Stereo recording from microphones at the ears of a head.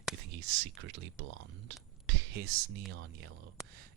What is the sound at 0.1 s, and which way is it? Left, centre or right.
Speech, right.